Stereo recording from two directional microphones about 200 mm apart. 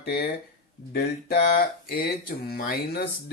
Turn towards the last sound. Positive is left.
turn(degrees=50)  # may be behind; listen again after turning